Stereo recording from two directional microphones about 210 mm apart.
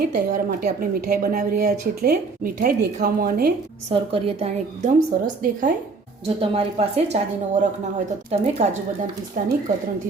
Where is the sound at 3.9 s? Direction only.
25° right (ahead or behind).